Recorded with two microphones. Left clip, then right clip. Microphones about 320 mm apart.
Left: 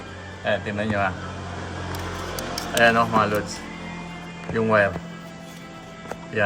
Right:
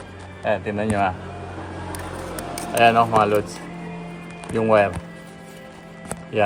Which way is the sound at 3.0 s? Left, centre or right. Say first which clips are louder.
Right 3 dB; centre.